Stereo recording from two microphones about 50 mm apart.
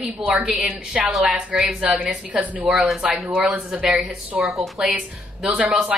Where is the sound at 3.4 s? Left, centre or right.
Right.